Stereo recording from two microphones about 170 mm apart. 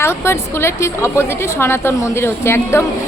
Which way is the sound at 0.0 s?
15° left (ahead or behind).